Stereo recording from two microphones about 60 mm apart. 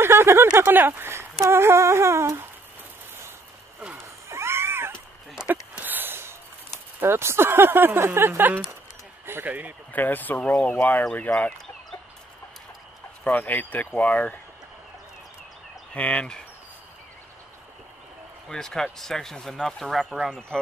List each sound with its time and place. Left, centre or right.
0.0 s a sound: right
0.6 s speech: right
1.5 s humming: right
4.3 s a sound: right
5.5 s a sound: right
7.0 s speech: right
9.9 s speech: left
13.4 s speech: left
15.9 s speech: left
18.5 s speech: centre